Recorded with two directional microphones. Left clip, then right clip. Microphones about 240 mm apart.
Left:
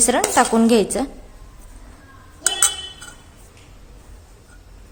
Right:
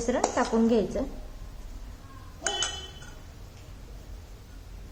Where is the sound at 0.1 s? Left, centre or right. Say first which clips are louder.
Left 8 dB; left.